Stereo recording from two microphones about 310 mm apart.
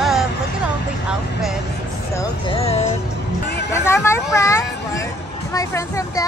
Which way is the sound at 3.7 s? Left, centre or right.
Centre.